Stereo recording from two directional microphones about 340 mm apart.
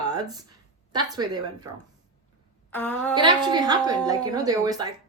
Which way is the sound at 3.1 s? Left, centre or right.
Centre.